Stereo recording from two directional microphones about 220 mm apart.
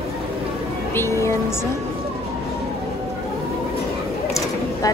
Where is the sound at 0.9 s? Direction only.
10° left (ahead or behind).